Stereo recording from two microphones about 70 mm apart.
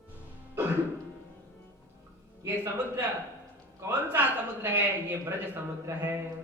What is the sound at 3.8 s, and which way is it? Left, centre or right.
Speech, right.